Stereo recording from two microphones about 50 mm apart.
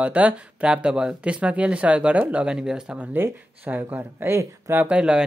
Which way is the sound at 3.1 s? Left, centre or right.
Right.